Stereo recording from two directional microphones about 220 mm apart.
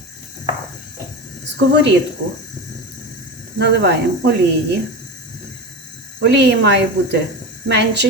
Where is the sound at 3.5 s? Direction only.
50° right (ahead or behind).